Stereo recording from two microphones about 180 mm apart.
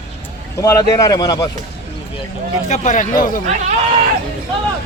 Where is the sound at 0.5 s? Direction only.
15° left (ahead or behind).